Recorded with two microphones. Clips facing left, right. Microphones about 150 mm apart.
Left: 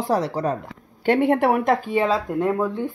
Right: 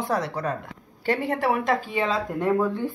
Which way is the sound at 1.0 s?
60° left (ahead or behind).